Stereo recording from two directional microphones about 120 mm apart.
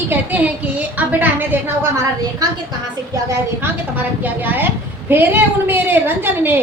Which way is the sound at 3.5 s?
15° right (ahead or behind).